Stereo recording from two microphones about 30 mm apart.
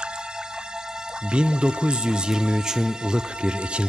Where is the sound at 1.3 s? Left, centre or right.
Right.